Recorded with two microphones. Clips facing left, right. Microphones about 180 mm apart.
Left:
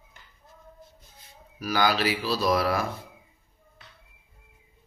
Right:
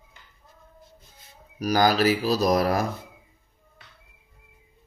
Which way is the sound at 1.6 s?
40° right (ahead or behind).